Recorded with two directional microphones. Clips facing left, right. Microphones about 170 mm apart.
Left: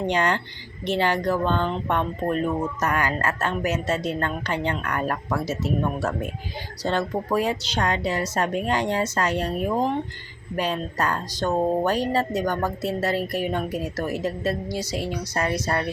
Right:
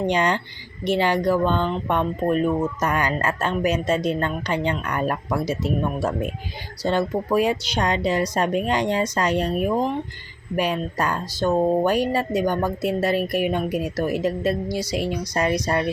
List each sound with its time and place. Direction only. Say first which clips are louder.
0.1 s speech: right 2 dB; 15° right (ahead or behind)